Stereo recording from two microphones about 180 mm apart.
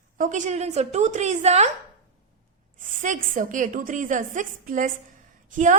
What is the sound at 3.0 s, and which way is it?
Speech, 45° right (ahead or behind).